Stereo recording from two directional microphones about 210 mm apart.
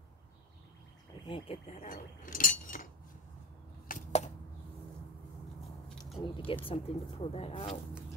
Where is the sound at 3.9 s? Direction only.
30° left (ahead or behind).